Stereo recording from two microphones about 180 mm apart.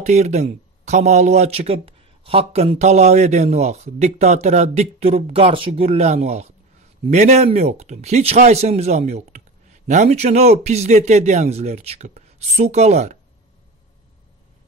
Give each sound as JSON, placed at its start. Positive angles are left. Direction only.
{"t": 0.0, "sound": "speech", "side_deg": -40}